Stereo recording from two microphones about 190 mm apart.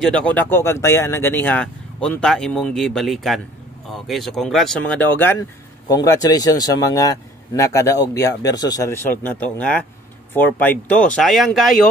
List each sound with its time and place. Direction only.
0.0 s a man's voice: 5° left (ahead or behind)